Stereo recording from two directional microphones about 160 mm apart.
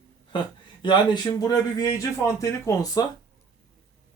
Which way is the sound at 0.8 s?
25° left (ahead or behind).